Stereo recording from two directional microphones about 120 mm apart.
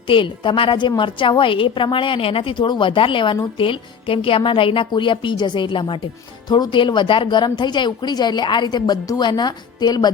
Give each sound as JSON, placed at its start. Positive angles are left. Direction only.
{"t": 0.1, "sound": "a woman's voice", "side_deg": 45}